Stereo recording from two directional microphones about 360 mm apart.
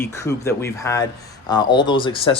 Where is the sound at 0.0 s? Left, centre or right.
Centre.